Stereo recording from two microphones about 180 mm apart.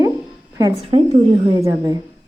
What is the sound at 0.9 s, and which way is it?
A woman's voice, 35° right (ahead or behind).